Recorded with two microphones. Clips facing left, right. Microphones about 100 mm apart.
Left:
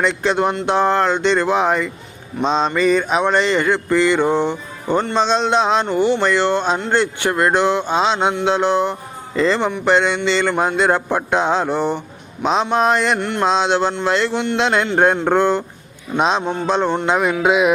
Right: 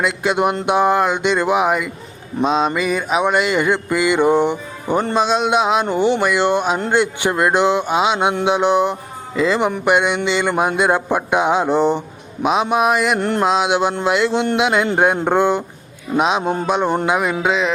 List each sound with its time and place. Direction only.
0.0 s mantra: 10° right (ahead or behind)
5.9 s mantra: 20° right (ahead or behind)
13.1 s mantra: 40° right (ahead or behind)
13.4 s mantra: 5° right (ahead or behind)
17.1 s music: 5° right (ahead or behind)